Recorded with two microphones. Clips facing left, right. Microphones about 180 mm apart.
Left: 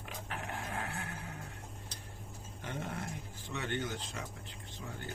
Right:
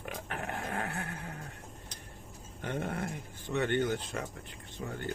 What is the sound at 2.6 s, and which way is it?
Speech, 55° right (ahead or behind).